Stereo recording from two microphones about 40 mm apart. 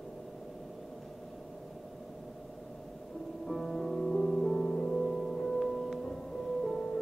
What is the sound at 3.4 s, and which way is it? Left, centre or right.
Music, centre.